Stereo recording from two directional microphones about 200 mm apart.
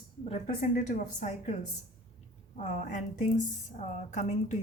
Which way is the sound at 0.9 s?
40° left (ahead or behind).